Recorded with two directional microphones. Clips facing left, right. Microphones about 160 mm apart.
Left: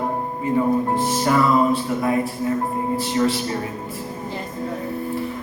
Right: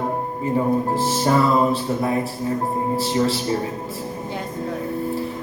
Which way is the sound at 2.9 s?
30° right (ahead or behind).